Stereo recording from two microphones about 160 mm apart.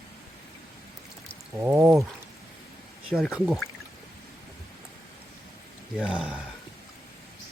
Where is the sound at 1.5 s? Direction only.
10° right (ahead or behind).